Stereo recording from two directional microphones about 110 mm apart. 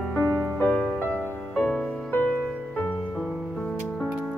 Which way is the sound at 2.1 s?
15° left (ahead or behind).